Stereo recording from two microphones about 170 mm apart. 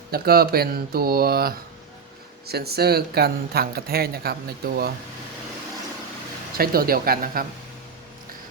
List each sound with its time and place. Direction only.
0.1 s speech: 65° right (ahead or behind)
6.6 s speech: 60° right (ahead or behind)